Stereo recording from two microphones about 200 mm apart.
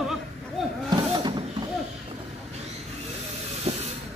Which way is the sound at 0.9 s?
20° right (ahead or behind).